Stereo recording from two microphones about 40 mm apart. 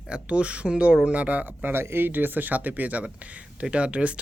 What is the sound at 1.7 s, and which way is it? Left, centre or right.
Speech, right.